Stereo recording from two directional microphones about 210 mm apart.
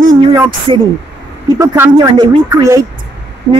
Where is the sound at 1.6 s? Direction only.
15° right (ahead or behind).